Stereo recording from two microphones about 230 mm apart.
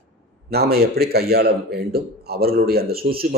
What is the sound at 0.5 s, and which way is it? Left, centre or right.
A man's voice, right.